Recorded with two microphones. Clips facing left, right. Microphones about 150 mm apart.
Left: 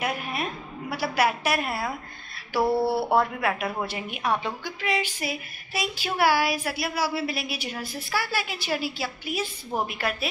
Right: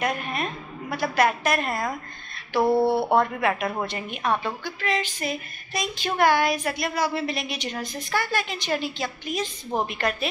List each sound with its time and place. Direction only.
0.0 s a woman's voice: 5° left (ahead or behind)
2.7 s a sound: 20° right (ahead or behind)
3.2 s a woman's voice: 5° left (ahead or behind)